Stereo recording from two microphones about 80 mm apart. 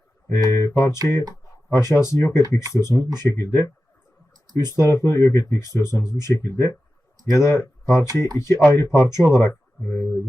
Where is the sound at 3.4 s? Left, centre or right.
Left.